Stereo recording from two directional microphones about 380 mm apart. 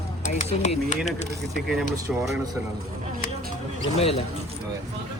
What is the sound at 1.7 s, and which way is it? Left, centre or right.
Speech, centre.